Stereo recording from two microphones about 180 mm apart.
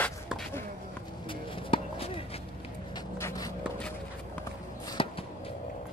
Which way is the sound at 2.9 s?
15° left (ahead or behind).